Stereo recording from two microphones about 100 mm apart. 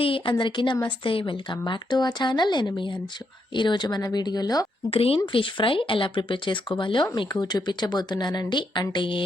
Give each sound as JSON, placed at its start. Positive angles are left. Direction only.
{"t": 0.0, "sound": "a woman's voice", "side_deg": 60}
{"t": 4.9, "sound": "a woman's voice", "side_deg": 70}